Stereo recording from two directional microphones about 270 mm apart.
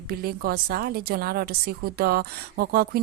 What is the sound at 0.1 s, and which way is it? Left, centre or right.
Speech, right.